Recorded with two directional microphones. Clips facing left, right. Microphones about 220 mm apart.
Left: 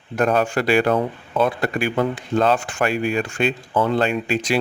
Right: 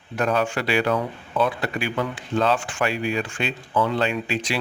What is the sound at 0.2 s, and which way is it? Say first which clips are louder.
Speech: left 4 dB; 45° left (ahead or behind).